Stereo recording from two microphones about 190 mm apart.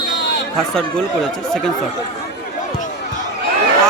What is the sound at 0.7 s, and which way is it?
Speech, centre (ahead or behind).